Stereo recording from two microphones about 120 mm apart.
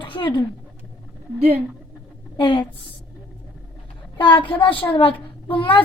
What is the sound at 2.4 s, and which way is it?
Speech, 40° left (ahead or behind).